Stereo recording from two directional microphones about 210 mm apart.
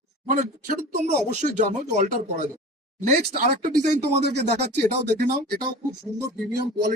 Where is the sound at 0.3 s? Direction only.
40° right (ahead or behind).